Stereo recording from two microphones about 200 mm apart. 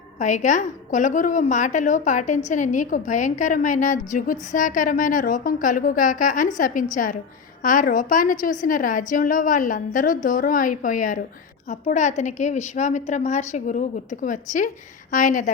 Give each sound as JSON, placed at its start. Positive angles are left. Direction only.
{"t": 0.2, "sound": "a woman's voice", "side_deg": 40}